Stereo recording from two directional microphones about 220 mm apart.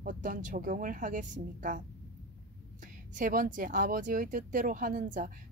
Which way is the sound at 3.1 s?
35° right (ahead or behind).